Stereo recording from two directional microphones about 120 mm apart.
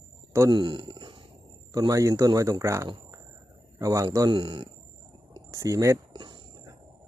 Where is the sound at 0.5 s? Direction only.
40° right (ahead or behind).